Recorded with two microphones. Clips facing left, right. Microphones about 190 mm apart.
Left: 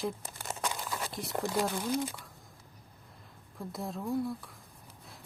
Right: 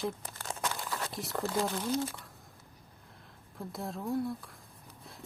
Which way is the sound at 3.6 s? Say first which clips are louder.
Left 1 dB; centre (ahead or behind).